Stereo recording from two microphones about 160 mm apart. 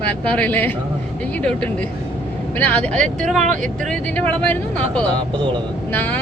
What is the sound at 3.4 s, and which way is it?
Speech, 55° right (ahead or behind).